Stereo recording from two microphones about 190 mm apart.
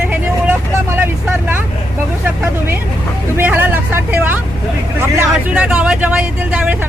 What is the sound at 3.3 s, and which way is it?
Speech, 10° right (ahead or behind).